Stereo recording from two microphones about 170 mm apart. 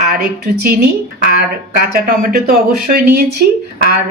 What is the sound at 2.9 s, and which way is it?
Speech, 65° right (ahead or behind).